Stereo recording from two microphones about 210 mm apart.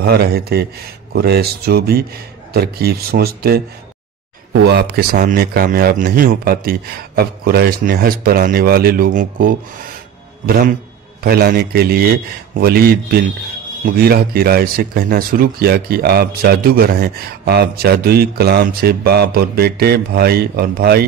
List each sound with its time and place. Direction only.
0.0 s speech: 50° right (ahead or behind)